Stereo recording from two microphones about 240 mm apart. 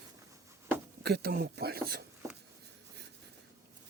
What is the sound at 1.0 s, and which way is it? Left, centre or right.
Speech, right.